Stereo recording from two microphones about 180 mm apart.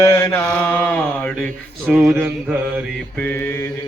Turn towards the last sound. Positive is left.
turn(degrees=15)  # may be behind; listen again after turning